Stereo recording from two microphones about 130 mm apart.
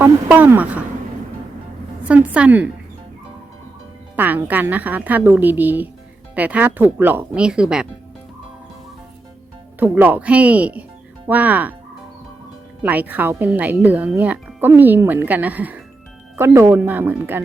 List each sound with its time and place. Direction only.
0.0 s a sound: 15° right (ahead or behind)
2.0 s a woman's voice: 10° right (ahead or behind)
4.1 s speech: 15° right (ahead or behind)
9.8 s speech: 15° right (ahead or behind)
12.8 s speech: 10° right (ahead or behind)